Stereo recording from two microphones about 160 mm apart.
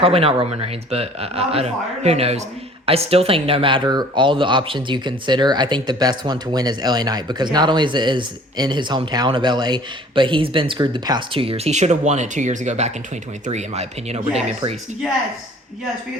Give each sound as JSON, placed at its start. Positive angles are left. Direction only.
{"t": 0.0, "sound": "a man's voice", "side_deg": -35}